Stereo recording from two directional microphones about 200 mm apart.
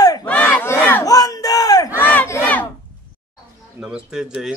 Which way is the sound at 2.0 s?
10° left (ahead or behind).